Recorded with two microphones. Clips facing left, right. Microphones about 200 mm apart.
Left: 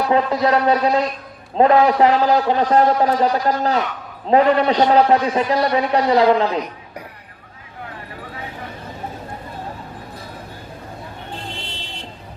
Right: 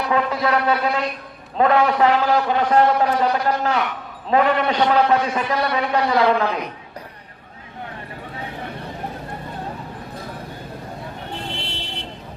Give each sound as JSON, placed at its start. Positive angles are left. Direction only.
{"t": 0.1, "sound": "a man's voice", "side_deg": 35}
{"t": 11.5, "sound": "vehicle", "side_deg": -65}